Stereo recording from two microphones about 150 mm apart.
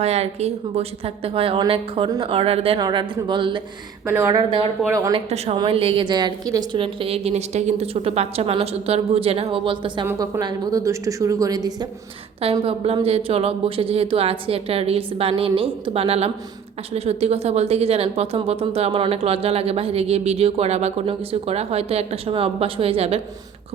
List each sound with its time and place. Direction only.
0.0 s a woman's voice: 45° right (ahead or behind); by 2.3 s 30° right (ahead or behind)
2.3 s a woman's voice: 40° right (ahead or behind)
2.8 s a woman's voice: 25° right (ahead or behind)
4.0 s a woman's voice: 15° right (ahead or behind); by 4.7 s 35° right (ahead or behind)
5.1 s a woman's voice: 45° right (ahead or behind)
10.1 s a woman's voice: 15° right (ahead or behind)
12.4 s a woman's voice: 40° right (ahead or behind)